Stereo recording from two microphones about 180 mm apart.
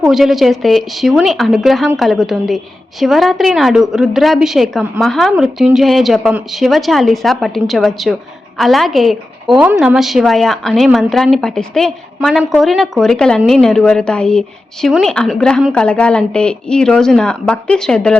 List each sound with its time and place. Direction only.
0.0 s a woman's voice: centre (ahead or behind)